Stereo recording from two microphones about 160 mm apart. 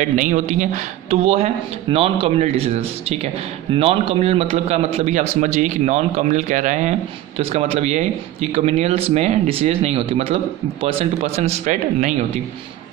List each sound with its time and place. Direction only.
0.1 s a man's voice: 50° right (ahead or behind)